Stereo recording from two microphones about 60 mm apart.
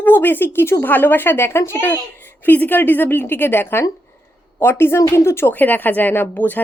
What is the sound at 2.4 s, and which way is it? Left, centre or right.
Speech, left.